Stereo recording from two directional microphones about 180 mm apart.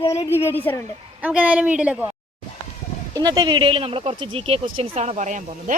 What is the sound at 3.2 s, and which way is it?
Speech, 20° right (ahead or behind).